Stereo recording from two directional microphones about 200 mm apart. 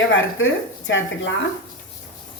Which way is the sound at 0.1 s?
80° left.